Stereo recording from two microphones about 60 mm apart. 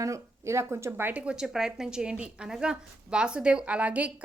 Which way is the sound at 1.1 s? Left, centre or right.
Centre.